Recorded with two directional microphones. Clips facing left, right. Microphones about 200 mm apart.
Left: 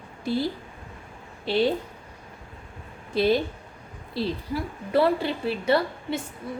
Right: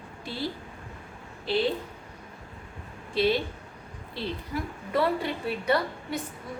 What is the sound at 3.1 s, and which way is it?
A woman's voice, 40° left (ahead or behind).